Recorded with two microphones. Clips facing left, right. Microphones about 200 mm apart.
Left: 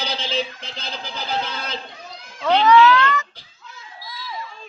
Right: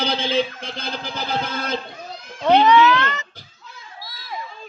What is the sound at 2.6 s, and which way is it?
Speech, 20° right (ahead or behind).